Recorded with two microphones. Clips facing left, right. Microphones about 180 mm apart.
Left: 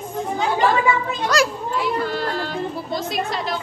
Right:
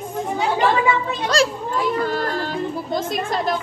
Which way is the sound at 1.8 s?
45° right (ahead or behind).